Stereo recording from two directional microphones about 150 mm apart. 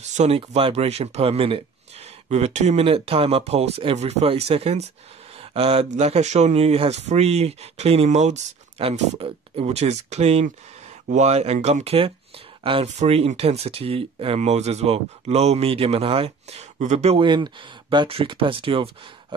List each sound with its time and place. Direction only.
0.1 s speech: 50° right (ahead or behind)
17.2 s speech: 30° right (ahead or behind)